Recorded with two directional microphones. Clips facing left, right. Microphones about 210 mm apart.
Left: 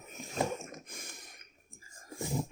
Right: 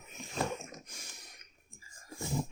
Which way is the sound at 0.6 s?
50° left (ahead or behind).